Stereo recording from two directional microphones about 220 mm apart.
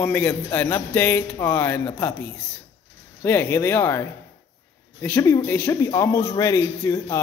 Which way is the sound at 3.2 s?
10° left (ahead or behind).